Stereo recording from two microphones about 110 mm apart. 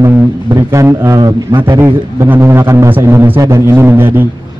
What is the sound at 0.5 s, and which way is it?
Speech, 30° right (ahead or behind).